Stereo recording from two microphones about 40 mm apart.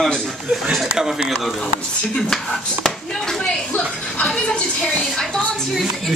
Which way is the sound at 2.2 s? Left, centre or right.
Centre.